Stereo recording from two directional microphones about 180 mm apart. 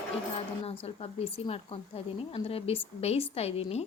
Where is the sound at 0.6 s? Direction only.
30° left (ahead or behind).